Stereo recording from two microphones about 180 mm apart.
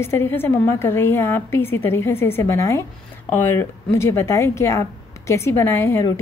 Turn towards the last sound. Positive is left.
turn(degrees=15)  # may be behind; listen again after turning